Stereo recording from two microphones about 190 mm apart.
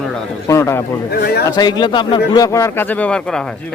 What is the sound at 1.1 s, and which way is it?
Speech, 55° left (ahead or behind).